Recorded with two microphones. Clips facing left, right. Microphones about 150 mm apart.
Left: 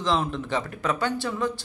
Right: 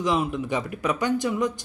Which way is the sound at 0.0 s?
10° right (ahead or behind).